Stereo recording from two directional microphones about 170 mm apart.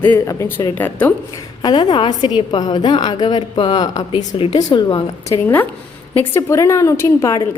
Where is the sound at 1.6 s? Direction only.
30° left (ahead or behind).